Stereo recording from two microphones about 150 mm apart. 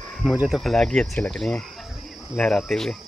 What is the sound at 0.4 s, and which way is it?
Speech, centre (ahead or behind).